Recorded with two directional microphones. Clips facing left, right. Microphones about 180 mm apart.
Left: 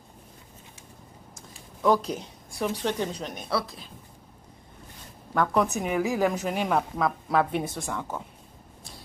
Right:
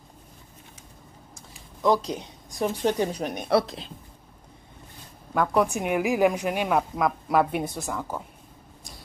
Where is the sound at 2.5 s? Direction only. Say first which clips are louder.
Right 3 dB; 40° right (ahead or behind).